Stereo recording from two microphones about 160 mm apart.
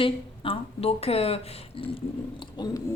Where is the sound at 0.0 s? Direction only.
35° left (ahead or behind).